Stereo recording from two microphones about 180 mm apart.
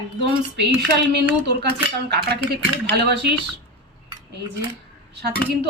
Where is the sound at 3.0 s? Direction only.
65° right (ahead or behind).